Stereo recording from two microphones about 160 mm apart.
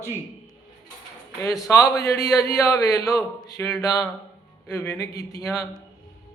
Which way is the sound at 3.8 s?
25° left (ahead or behind).